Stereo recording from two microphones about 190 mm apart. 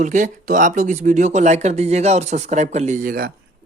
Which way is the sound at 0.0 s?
40° right (ahead or behind).